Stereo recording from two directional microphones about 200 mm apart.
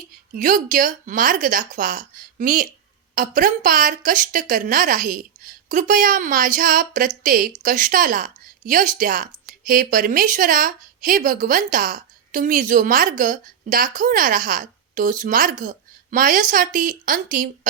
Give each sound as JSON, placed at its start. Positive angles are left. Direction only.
{"t": 0.3, "sound": "a woman's voice", "side_deg": -40}